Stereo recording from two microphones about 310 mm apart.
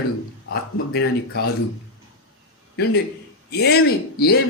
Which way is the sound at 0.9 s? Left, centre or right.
Left.